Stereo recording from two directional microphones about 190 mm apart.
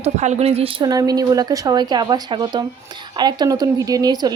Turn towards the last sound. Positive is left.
turn(degrees=-20)  # may be behind; listen again after turning